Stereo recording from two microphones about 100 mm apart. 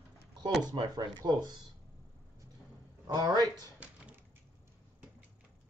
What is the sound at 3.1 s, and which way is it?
Speech, 40° right (ahead or behind).